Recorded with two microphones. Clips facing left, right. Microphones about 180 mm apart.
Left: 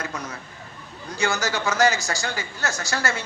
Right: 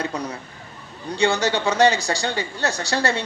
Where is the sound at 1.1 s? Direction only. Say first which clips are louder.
Right 5 dB; 30° right (ahead or behind).